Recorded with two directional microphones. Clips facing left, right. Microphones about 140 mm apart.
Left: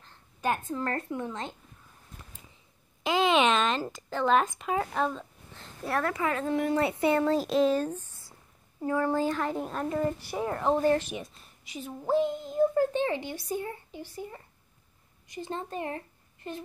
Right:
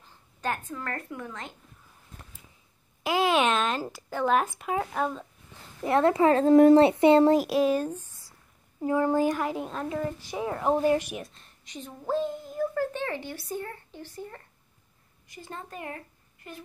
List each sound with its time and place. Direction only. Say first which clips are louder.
0.7 s a woman's voice: left 4 dB; 30° left (ahead or behind)
3.0 s a woman's voice: even; 10° right (ahead or behind)
5.9 s speech: right 8 dB; 25° right (ahead or behind); by 6.8 s 40° right (ahead or behind)
6.8 s speech: right 7 dB; 25° right (ahead or behind)
7.4 s speech: even; 10° right (ahead or behind)
11.1 s a child's voice: even; 5° left (ahead or behind)
15.2 s a woman's voice: left 5 dB; 20° left (ahead or behind)